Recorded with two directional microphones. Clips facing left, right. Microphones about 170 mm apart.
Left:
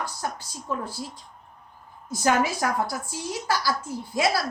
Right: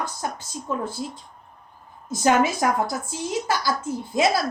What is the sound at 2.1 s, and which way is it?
A woman's voice, 20° right (ahead or behind).